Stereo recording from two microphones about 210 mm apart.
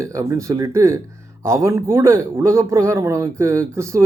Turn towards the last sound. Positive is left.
turn(degrees=-15)  # may be behind; listen again after turning